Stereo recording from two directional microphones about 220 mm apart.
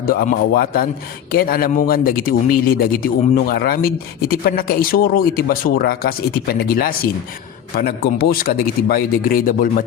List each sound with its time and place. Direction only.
0.0 s a man's voice: 40° left (ahead or behind)